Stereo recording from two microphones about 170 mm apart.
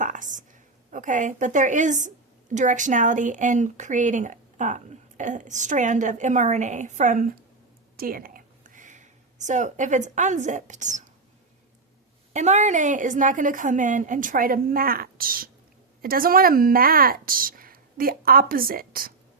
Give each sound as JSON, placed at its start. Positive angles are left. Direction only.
{"t": 0.0, "sound": "a sound", "side_deg": -50}
{"t": 0.9, "sound": "speech", "side_deg": -50}
{"t": 12.3, "sound": "speech", "side_deg": -45}